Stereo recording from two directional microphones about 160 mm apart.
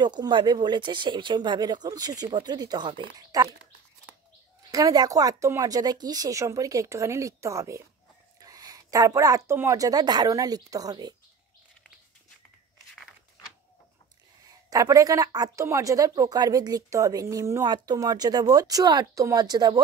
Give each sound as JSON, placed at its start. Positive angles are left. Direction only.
{"t": 0.0, "sound": "speech", "side_deg": -25}
{"t": 4.6, "sound": "speech", "side_deg": -20}
{"t": 14.7, "sound": "speech", "side_deg": -20}